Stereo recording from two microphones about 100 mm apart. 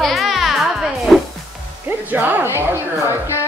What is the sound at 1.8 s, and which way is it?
Speech, 20° right (ahead or behind).